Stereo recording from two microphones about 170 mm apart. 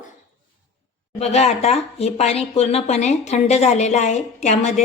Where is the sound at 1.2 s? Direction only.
40° left (ahead or behind).